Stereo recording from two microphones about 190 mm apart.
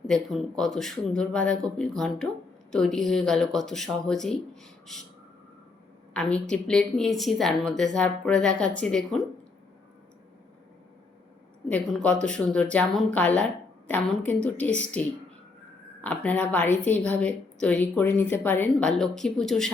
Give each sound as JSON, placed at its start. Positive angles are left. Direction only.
{"t": 0.1, "sound": "speech", "side_deg": 0}
{"t": 6.1, "sound": "speech", "side_deg": 5}
{"t": 11.7, "sound": "a woman's voice", "side_deg": 5}